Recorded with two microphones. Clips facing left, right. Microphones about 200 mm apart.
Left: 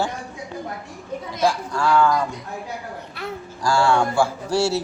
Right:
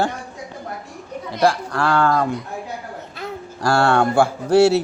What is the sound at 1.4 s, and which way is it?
Speech, 65° right (ahead or behind).